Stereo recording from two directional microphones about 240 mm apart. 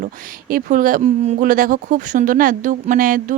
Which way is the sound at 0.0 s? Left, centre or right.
Right.